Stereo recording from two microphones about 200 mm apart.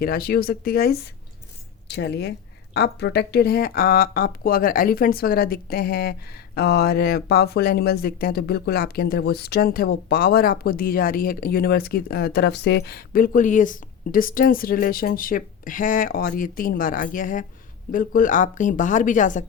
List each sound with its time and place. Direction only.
0.0 s a woman's voice: 50° left (ahead or behind)